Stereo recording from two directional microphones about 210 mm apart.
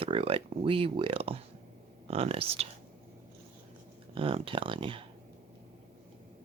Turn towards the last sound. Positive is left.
turn(degrees=-25)  # may be behind; listen again after turning